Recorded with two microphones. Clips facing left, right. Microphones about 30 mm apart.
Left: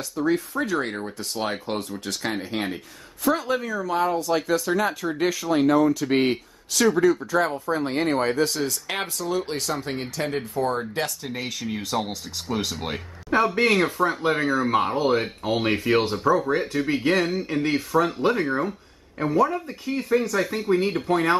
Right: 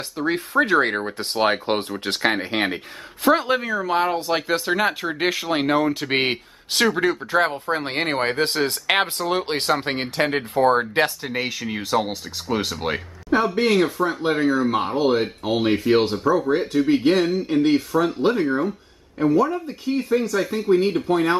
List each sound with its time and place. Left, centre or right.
0.2 s speech: right
11.2 s speech: right
13.7 s speech: centre
15.0 s speech: centre